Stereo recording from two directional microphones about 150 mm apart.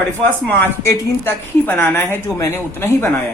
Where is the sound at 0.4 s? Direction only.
10° left (ahead or behind).